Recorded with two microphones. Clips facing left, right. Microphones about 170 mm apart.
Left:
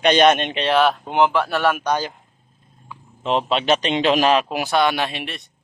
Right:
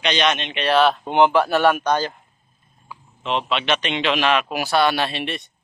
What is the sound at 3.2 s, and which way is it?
A man's voice, 35° left (ahead or behind).